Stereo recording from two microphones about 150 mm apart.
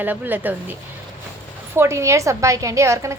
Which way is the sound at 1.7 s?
20° right (ahead or behind).